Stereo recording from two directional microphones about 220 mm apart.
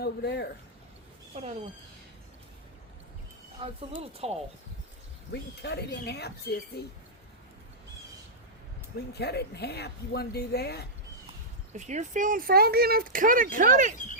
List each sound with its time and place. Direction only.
0.0 s speech: 50° left (ahead or behind)
1.4 s speech: 30° right (ahead or behind)
3.6 s speech: 25° right (ahead or behind)
5.3 s speech: 50° left (ahead or behind)
9.1 s speech: 50° left (ahead or behind)
11.7 s speech: 30° right (ahead or behind)